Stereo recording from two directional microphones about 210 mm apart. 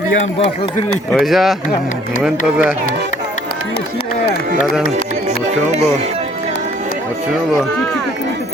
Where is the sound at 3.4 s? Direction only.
50° left (ahead or behind).